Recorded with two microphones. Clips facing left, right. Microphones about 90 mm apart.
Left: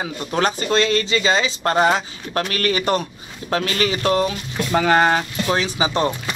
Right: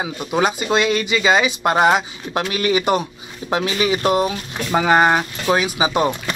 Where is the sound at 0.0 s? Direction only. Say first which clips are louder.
Right 2 dB; 10° right (ahead or behind).